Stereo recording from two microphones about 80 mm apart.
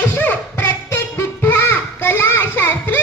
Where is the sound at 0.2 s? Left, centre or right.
Left.